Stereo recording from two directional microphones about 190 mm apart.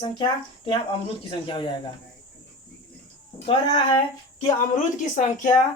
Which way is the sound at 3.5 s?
25° left (ahead or behind).